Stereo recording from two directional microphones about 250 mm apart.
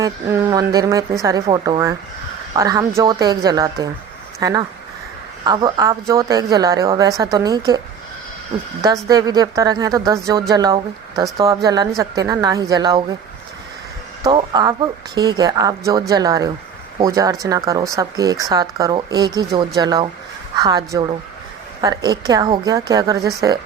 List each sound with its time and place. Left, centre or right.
0.0 s speech: centre
9.0 s speech: centre
14.3 s speech: centre